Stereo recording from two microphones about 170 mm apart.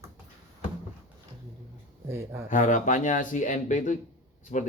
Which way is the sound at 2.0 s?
15° right (ahead or behind).